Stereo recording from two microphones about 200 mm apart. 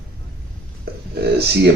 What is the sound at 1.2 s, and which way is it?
Speech, 55° right (ahead or behind).